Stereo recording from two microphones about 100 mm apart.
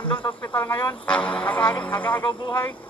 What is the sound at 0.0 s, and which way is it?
Speech, 55° left (ahead or behind).